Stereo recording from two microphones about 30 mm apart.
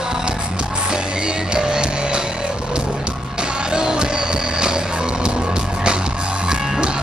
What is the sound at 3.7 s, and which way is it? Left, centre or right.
Music, right.